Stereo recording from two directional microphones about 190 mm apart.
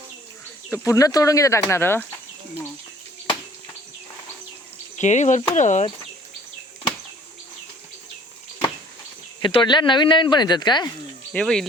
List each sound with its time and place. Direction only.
0.7 s speech: 15° left (ahead or behind)
4.9 s speech: 40° left (ahead or behind)
9.4 s speech: 25° left (ahead or behind)
11.3 s speech: 5° left (ahead or behind)